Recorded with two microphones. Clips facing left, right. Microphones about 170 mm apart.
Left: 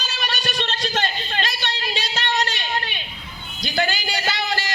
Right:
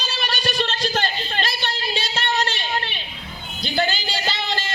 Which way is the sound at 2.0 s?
30° right (ahead or behind).